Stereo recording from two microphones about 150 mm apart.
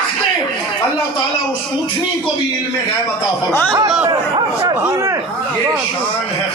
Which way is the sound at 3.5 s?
15° left (ahead or behind).